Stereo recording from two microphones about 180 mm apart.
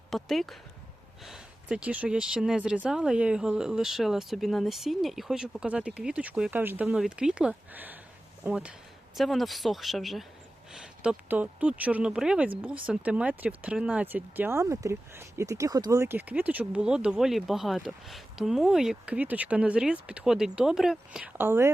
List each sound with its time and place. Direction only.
0.1 s speech: centre (ahead or behind)